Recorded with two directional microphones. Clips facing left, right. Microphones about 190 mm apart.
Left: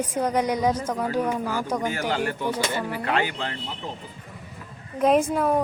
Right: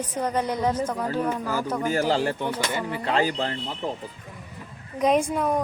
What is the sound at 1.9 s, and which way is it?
Speech, 30° right (ahead or behind).